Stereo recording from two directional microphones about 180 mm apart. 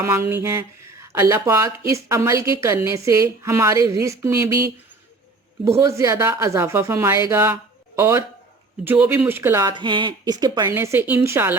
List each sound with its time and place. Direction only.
0.0 s speech: 15° right (ahead or behind)
5.6 s speech: 15° right (ahead or behind)
10.7 s speech: 10° right (ahead or behind)